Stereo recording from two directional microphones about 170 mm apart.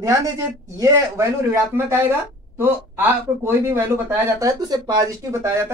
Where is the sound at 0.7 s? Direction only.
15° right (ahead or behind).